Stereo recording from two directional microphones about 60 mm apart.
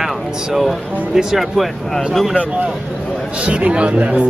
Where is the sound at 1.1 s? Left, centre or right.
Centre.